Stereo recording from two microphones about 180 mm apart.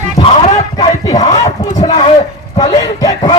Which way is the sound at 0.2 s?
35° left (ahead or behind).